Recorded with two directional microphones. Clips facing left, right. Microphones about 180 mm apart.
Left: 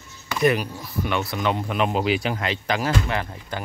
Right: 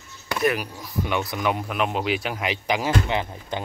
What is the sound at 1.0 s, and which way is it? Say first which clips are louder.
Speech: left 1 dB; 15° right (ahead or behind).